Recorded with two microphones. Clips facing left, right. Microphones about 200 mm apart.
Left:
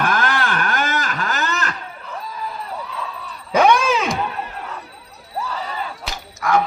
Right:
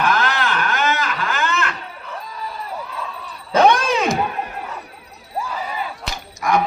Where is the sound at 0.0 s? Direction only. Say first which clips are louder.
Right 1 dB; 50° left (ahead or behind).